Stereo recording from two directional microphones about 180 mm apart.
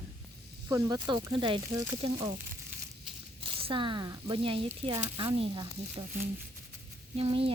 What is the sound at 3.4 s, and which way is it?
Speech, 30° right (ahead or behind).